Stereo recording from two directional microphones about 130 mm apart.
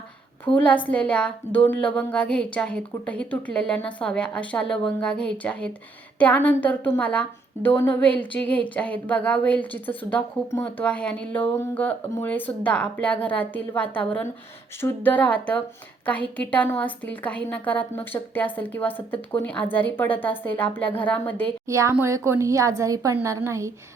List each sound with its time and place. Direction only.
0.4 s a woman's voice: 10° left (ahead or behind)
21.7 s speech: 25° right (ahead or behind)